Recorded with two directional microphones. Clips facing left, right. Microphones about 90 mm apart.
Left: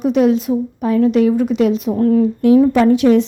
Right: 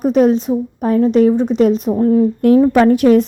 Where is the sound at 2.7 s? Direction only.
50° right (ahead or behind).